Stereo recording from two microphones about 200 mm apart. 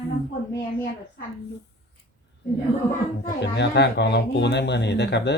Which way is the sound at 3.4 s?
60° left (ahead or behind).